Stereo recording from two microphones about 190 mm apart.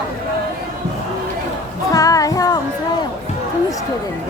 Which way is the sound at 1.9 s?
20° left (ahead or behind).